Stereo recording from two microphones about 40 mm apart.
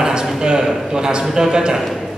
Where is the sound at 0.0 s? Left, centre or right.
Centre.